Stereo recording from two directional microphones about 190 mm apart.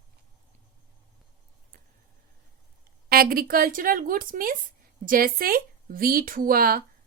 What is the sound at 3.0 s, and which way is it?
A woman's voice, 50° right (ahead or behind).